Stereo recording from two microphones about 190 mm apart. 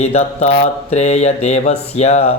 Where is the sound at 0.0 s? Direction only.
35° left (ahead or behind).